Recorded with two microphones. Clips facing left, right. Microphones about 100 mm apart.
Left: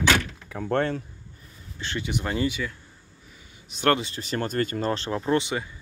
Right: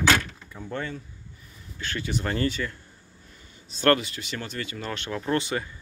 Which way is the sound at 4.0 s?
35° left (ahead or behind).